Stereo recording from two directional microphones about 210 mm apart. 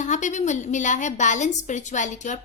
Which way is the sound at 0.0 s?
35° left (ahead or behind).